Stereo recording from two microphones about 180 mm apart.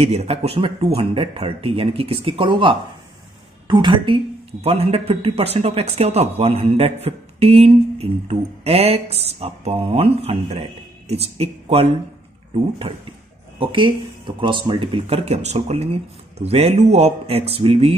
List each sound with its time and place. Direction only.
0.0 s speech: 35° right (ahead or behind)